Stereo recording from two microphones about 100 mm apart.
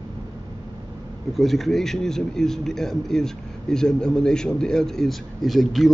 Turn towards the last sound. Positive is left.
turn(degrees=0)  # may be behind; listen again after turning